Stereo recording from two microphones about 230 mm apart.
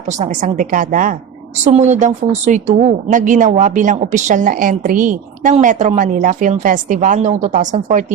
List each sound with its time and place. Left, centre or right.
0.1 s a woman's voice: right